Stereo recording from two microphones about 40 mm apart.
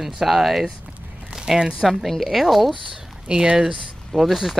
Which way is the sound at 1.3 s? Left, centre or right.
Centre.